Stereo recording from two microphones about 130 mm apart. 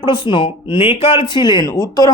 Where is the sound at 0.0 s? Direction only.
35° left (ahead or behind).